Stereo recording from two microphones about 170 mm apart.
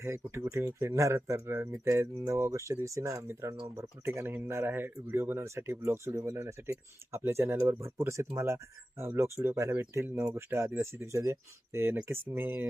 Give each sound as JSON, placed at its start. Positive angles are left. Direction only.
{"t": 0.0, "sound": "speech", "side_deg": -15}